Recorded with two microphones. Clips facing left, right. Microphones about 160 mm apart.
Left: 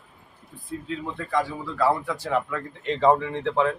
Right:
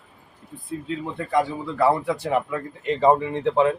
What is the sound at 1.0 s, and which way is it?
Speech, 20° right (ahead or behind).